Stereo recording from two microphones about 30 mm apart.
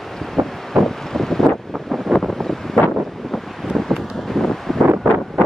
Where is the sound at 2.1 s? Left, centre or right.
Centre.